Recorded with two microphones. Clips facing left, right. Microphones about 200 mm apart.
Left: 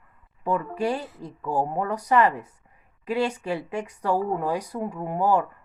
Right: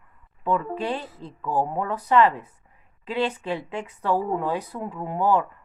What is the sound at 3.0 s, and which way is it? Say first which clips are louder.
Speech: left 1 dB; 10° left (ahead or behind).